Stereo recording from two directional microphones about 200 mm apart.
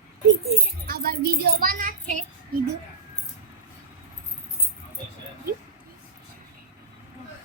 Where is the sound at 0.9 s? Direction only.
50° right (ahead or behind).